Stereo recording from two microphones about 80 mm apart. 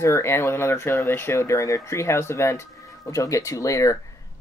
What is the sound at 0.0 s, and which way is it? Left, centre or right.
Speech, left.